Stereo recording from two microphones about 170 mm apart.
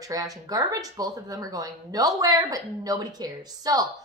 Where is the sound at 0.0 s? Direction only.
20° right (ahead or behind).